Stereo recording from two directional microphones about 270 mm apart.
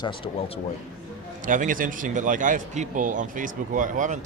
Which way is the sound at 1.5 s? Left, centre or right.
Right.